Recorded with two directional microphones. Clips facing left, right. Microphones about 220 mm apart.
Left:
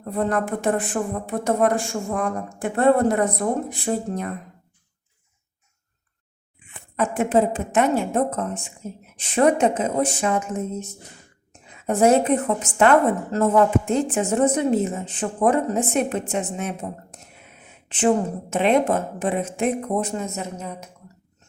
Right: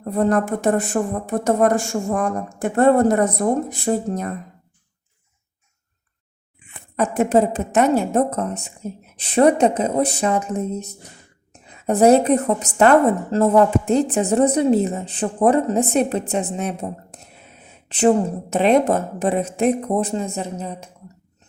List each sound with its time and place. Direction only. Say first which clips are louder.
0.0 s a woman's voice: right 4 dB; 40° right (ahead or behind)
6.9 s a woman's voice: right 3 dB; 40° right (ahead or behind)